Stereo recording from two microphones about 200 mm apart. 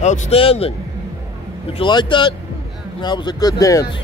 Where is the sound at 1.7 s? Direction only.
25° left (ahead or behind).